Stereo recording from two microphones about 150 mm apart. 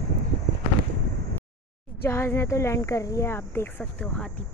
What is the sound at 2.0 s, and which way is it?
Speech, 15° left (ahead or behind).